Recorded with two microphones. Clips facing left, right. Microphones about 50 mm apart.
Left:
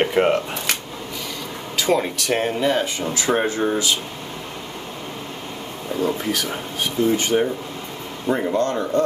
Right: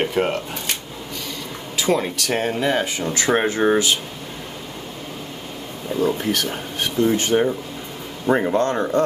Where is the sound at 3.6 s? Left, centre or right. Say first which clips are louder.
Right 4 dB; right.